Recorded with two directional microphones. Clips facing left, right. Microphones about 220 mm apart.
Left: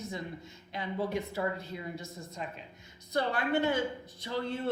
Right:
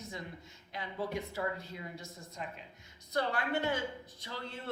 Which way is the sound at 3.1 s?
25° left (ahead or behind).